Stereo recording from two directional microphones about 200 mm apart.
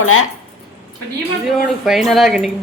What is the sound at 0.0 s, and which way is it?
Speech, 90° left.